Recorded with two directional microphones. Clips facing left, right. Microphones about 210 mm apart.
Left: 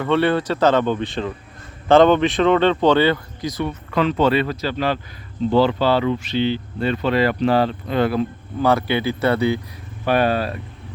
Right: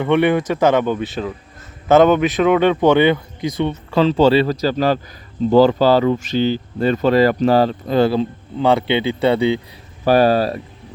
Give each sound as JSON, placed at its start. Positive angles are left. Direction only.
{"t": 0.0, "sound": "speech", "side_deg": -15}
{"t": 3.6, "sound": "speech", "side_deg": -30}
{"t": 10.1, "sound": "speech", "side_deg": -35}